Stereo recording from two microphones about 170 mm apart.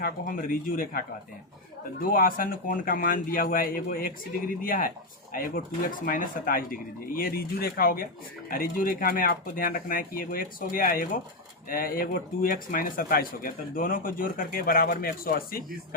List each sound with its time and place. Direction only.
0.0 s speech: 55° left (ahead or behind)